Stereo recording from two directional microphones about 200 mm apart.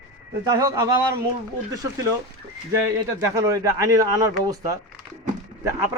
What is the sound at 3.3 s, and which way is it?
A man's voice, 15° right (ahead or behind).